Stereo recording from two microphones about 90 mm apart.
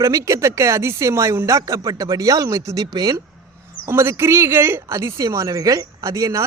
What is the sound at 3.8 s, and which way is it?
A man's voice, 30° right (ahead or behind).